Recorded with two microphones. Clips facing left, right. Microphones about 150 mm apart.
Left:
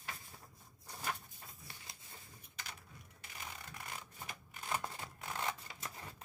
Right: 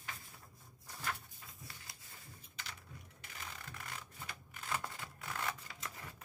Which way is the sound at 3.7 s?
20° left (ahead or behind).